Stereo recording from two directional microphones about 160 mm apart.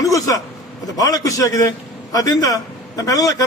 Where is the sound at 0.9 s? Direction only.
20° left (ahead or behind).